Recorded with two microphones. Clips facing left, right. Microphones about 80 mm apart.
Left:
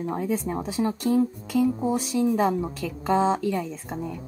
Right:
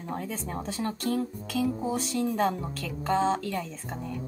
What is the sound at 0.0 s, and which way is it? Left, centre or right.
Speech, centre.